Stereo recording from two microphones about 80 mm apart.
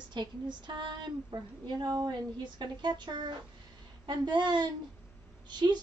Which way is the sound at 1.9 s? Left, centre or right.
Right.